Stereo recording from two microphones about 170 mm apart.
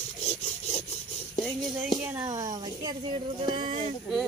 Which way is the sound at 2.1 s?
20° right (ahead or behind).